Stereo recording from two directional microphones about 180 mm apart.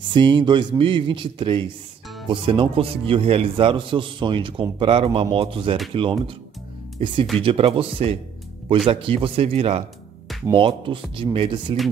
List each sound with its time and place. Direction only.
0.0 s a man's voice: 25° right (ahead or behind)